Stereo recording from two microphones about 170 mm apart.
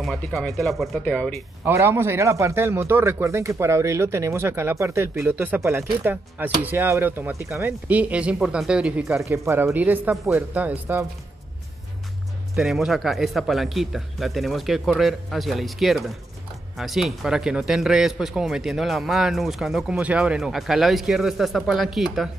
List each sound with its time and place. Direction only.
0.0 s a man's voice: centre (ahead or behind)
1.7 s a man's voice: 15° right (ahead or behind)
9.2 s a man's voice: 15° right (ahead or behind)
12.5 s a man's voice: centre (ahead or behind)